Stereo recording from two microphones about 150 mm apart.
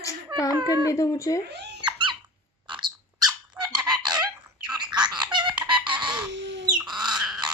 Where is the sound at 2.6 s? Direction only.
30° right (ahead or behind).